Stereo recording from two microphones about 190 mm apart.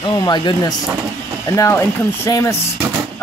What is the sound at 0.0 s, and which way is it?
Speech, 20° left (ahead or behind).